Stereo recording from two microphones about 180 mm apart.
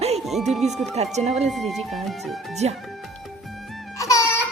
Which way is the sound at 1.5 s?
Centre (ahead or behind).